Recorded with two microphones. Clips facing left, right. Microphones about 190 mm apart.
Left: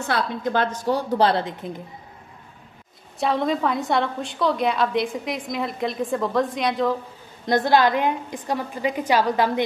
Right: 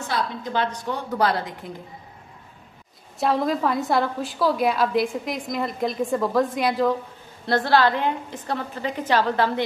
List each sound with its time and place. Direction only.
0.1 s a woman's voice: 50° left (ahead or behind); by 1.7 s 25° left (ahead or behind)
3.2 s a woman's voice: centre (ahead or behind)
7.4 s a woman's voice: 15° left (ahead or behind)